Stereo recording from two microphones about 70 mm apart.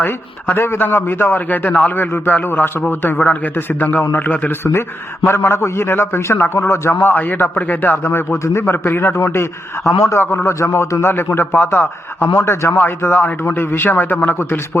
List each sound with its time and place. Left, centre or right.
0.0 s a man's voice: left
5.2 s speech: left
7.0 s a man's voice: left
8.0 s speech: left
12.3 s speech: left